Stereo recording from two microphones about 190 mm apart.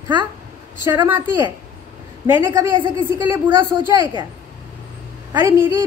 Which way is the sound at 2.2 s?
10° right (ahead or behind).